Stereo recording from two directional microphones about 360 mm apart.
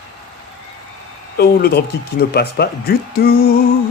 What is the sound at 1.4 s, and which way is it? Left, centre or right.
Speech, left.